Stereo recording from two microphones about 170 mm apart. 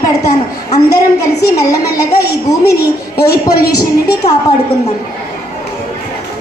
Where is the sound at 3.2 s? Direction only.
20° left (ahead or behind).